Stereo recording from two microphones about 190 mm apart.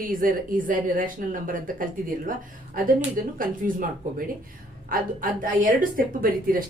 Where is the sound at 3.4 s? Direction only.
45° right (ahead or behind).